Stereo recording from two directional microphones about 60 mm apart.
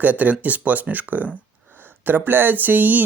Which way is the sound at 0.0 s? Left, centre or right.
Right.